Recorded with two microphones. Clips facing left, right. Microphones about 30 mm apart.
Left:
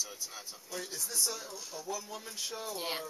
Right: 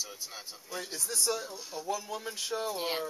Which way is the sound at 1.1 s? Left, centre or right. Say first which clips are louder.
Right 5 dB; right.